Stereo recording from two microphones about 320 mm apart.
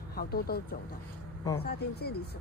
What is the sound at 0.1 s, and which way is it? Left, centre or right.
Speech, left.